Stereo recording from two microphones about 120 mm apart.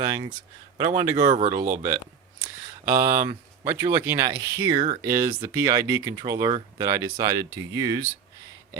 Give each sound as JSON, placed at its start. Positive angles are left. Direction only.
{"t": 0.0, "sound": "speech", "side_deg": -35}
{"t": 1.1, "sound": "speech", "side_deg": -75}
{"t": 2.8, "sound": "speech", "side_deg": -20}